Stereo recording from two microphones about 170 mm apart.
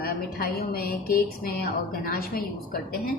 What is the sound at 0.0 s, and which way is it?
A woman's voice, 60° left (ahead or behind).